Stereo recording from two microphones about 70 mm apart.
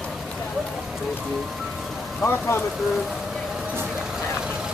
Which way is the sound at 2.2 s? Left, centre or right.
Left.